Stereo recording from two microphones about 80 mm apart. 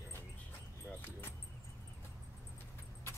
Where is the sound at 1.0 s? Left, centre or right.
Left.